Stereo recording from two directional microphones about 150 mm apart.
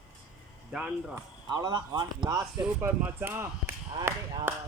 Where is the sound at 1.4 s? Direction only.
30° right (ahead or behind).